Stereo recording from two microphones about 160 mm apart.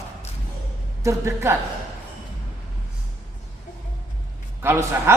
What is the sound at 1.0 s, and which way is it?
Speech, 20° right (ahead or behind).